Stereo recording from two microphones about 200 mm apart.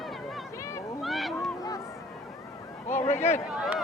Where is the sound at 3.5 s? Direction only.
5° right (ahead or behind).